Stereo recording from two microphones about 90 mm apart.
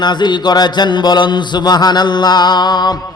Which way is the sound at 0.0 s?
55° left (ahead or behind).